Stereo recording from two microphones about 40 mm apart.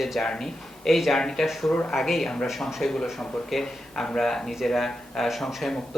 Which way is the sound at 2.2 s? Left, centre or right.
Centre.